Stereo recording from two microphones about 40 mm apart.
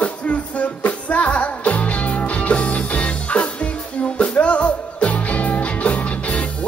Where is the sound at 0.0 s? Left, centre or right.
Left.